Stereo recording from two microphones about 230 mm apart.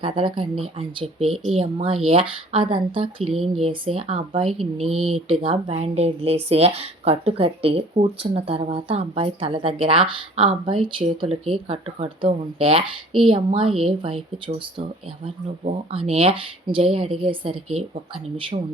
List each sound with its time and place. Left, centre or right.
0.0 s a woman's voice: right
3.2 s speech: centre
3.5 s a woman's voice: right